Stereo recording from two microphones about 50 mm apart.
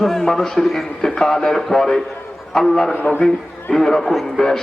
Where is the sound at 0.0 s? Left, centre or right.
Centre.